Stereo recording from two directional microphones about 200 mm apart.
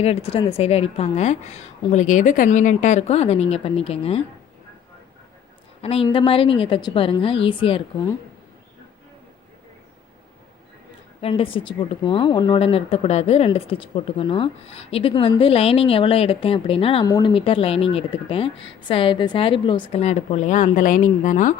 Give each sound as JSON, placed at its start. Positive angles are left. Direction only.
{"t": 0.0, "sound": "a woman's voice", "side_deg": 30}
{"t": 5.8, "sound": "speech", "side_deg": 30}
{"t": 11.2, "sound": "speech", "side_deg": 30}